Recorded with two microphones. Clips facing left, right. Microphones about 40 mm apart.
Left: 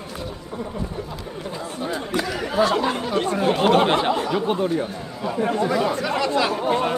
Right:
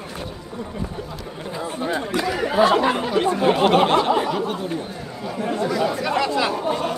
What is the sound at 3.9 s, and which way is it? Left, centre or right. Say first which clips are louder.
Speech: right 2 dB; centre.